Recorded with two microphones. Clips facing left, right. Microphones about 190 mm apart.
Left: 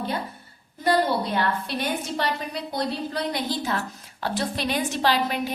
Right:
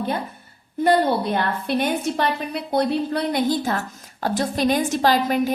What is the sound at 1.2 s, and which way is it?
A woman's voice, 55° right (ahead or behind).